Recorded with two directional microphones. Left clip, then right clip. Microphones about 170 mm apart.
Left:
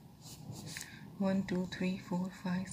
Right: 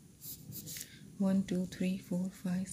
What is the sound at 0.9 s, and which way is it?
Speech, 65° right (ahead or behind).